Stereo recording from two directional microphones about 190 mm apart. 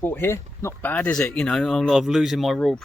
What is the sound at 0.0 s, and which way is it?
Speech, 10° left (ahead or behind).